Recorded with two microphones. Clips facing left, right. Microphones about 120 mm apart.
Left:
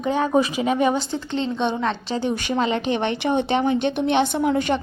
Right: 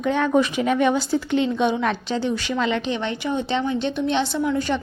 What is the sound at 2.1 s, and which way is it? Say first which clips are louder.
Speech: left 1 dB; 50° left (ahead or behind).